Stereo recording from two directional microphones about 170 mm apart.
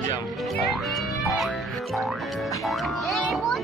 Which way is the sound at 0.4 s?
Centre (ahead or behind).